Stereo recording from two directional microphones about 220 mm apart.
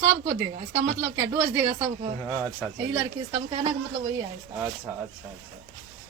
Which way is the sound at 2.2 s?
Centre (ahead or behind).